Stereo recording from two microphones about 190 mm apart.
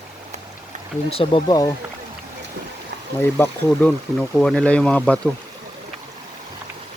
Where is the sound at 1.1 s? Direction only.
25° left (ahead or behind).